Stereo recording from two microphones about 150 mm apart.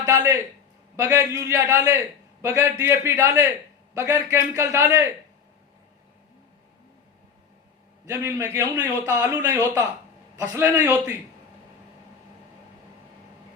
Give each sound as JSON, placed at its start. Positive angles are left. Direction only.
{"t": 0.0, "sound": "a man's voice", "side_deg": -20}
{"t": 8.0, "sound": "a man's voice", "side_deg": -20}